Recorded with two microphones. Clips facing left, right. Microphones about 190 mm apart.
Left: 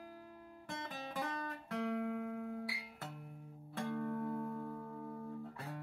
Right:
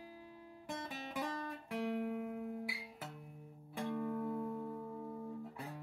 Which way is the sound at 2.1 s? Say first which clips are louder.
Even; 15° right (ahead or behind).